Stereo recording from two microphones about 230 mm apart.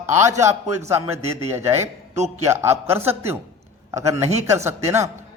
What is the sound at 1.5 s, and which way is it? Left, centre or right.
Speech, centre.